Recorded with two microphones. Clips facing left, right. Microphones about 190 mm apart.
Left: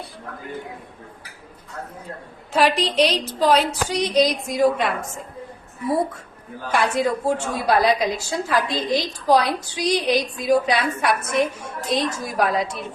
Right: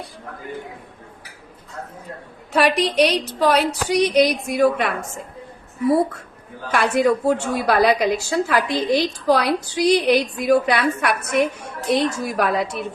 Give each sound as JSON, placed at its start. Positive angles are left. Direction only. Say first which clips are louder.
{"t": 2.5, "sound": "a woman's voice", "louder": "right 1 dB", "side_deg": -65}
{"t": 2.8, "sound": "a woman's voice", "louder": "right 2 dB", "side_deg": -10}
{"t": 3.4, "sound": "a woman's voice", "louder": "even", "side_deg": -65}
{"t": 6.7, "sound": "a woman's voice", "louder": "right 3 dB", "side_deg": -65}